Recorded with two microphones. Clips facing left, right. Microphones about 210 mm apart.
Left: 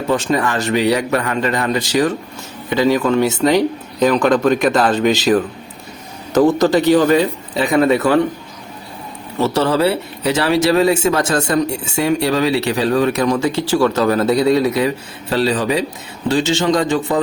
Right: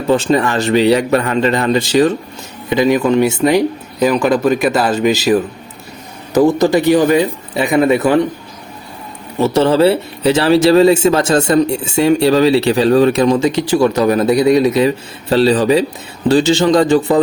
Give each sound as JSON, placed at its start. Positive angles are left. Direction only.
{"t": 0.1, "sound": "speech", "side_deg": -30}
{"t": 2.6, "sound": "a man's voice", "side_deg": -15}
{"t": 9.4, "sound": "a man's voice", "side_deg": -20}